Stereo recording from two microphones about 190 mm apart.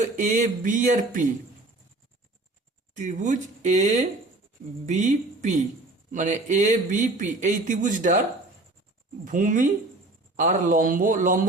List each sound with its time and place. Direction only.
0.2 s speech: 40° right (ahead or behind)
2.9 s speech: 40° right (ahead or behind)
9.2 s speech: 45° right (ahead or behind)